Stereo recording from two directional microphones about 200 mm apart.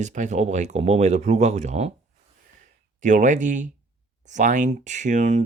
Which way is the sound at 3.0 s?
40° right (ahead or behind).